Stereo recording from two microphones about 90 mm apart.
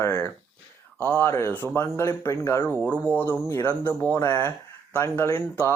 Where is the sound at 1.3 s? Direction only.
30° left (ahead or behind).